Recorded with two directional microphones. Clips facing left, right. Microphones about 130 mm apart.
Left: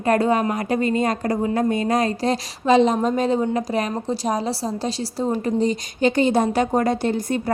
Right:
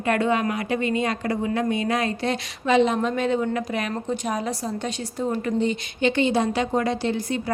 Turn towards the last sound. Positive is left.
turn(degrees=50)  # may be behind; listen again after turning